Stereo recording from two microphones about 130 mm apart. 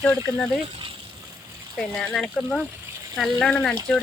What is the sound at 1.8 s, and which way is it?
Speech, 5° left (ahead or behind).